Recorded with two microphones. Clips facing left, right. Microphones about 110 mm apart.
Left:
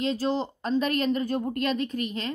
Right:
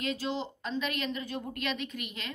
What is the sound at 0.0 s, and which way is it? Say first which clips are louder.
Speech: left 7 dB; 35° left (ahead or behind).